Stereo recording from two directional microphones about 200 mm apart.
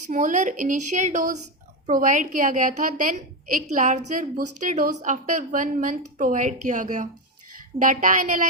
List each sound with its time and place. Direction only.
0.1 s a woman's voice: 40° right (ahead or behind)